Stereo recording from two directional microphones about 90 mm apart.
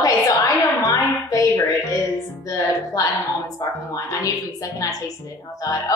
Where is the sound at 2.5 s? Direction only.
40° left (ahead or behind).